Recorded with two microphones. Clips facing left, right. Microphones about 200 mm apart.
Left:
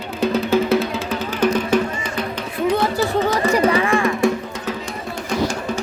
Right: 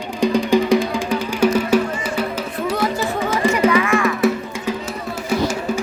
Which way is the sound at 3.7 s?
30° left (ahead or behind).